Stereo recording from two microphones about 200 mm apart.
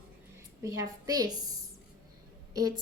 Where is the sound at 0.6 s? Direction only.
15° right (ahead or behind).